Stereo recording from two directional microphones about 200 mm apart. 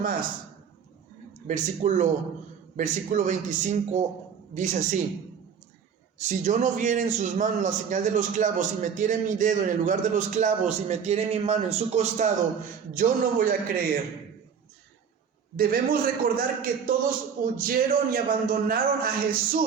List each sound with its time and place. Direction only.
1.5 s a man's voice: 35° right (ahead or behind)
6.1 s a man's voice: 40° right (ahead or behind)
15.5 s a man's voice: 50° right (ahead or behind)